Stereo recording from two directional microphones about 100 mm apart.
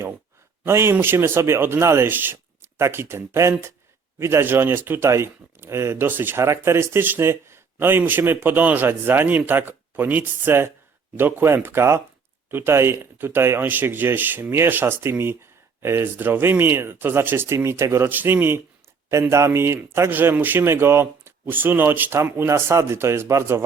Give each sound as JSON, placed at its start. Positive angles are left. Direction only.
{"t": 0.6, "sound": "speech", "side_deg": -25}